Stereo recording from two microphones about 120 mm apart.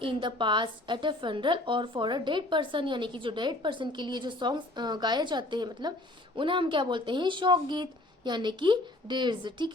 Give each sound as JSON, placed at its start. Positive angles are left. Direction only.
{"t": 0.0, "sound": "a woman's voice", "side_deg": -40}